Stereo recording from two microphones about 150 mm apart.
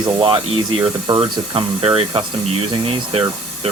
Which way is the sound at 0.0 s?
35° right (ahead or behind).